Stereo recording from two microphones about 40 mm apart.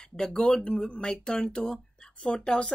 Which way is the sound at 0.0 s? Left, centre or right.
Centre.